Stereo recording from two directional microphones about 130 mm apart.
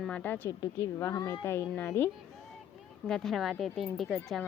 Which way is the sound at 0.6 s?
30° left (ahead or behind).